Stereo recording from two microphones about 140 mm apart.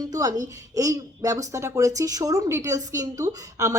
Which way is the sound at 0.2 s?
25° right (ahead or behind).